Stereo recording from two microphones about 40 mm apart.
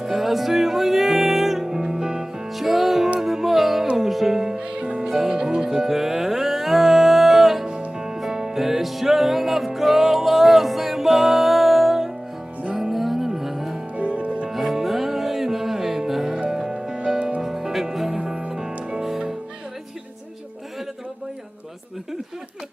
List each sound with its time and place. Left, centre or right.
0.0 s music: centre
2.5 s music: centre
4.6 s music: right
5.0 s music: centre
13.9 s music: right
14.5 s music: centre; by 17.4 s right
17.4 s music: centre